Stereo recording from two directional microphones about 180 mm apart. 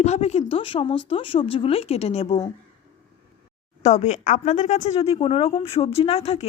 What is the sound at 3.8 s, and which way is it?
Speech, 40° left (ahead or behind).